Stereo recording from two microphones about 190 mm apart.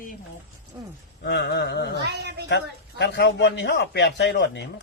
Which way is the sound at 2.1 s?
60° right (ahead or behind).